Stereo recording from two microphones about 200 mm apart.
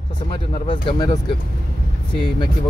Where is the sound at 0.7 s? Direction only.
25° left (ahead or behind).